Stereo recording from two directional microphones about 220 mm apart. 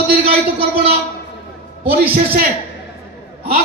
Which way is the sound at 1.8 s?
40° right (ahead or behind).